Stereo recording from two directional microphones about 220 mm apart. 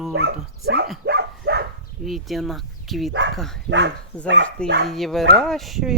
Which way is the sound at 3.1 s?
55° right (ahead or behind).